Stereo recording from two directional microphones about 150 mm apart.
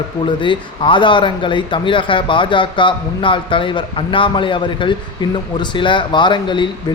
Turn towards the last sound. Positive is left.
turn(degrees=30)  # may be behind; listen again after turning